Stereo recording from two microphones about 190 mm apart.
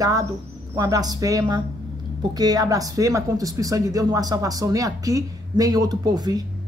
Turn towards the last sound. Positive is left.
turn(degrees=-20)  # may be behind; listen again after turning